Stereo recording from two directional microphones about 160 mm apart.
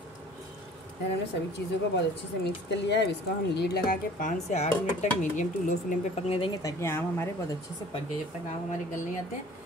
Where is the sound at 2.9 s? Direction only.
90° left.